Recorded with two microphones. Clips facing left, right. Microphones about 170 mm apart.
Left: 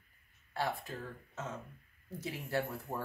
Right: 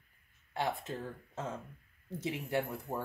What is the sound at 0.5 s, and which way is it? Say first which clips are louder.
Speech: right 2 dB; 20° right (ahead or behind).